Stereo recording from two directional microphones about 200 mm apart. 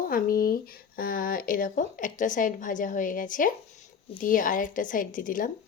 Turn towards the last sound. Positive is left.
turn(degrees=40)  # may be behind; listen again after turning